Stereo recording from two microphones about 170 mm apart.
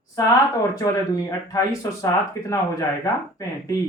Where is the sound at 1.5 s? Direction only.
20° left (ahead or behind).